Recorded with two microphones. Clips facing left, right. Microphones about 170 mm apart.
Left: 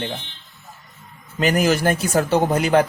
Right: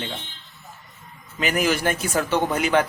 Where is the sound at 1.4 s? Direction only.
40° left (ahead or behind).